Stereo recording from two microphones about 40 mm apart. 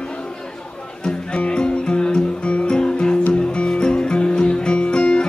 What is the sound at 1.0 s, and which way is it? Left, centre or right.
Music, left.